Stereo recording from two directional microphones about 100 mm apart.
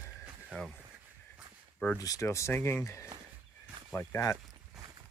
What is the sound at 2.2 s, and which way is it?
Speech, 25° left (ahead or behind).